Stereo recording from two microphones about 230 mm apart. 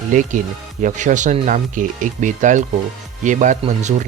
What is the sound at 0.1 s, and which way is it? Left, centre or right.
Speech, right.